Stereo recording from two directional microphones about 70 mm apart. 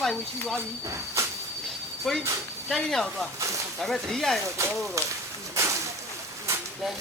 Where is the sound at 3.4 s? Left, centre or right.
Right.